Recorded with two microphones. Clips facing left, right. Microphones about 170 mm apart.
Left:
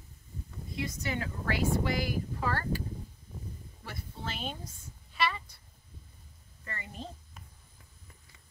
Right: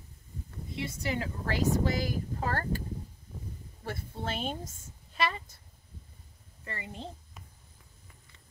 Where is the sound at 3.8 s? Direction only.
50° right (ahead or behind).